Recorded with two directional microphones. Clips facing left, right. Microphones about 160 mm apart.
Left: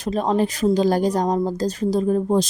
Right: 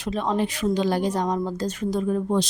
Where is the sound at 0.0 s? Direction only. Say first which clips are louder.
Left 4 dB; 40° left (ahead or behind).